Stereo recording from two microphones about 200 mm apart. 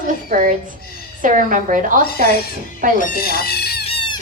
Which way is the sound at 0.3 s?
40° right (ahead or behind).